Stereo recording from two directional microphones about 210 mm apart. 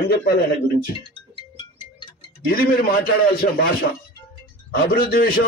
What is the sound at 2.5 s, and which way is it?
A man's voice, 45° left (ahead or behind).